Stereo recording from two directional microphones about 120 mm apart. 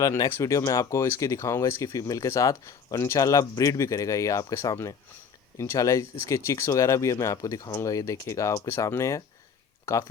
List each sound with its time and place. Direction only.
0.0 s speech: 25° left (ahead or behind)